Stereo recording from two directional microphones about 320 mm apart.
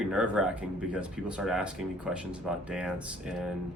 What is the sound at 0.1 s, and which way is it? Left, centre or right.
Speech, centre.